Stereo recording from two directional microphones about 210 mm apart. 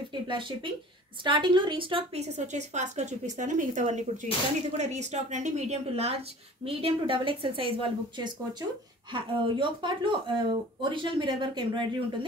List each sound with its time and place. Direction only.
0.1 s speech: 25° right (ahead or behind)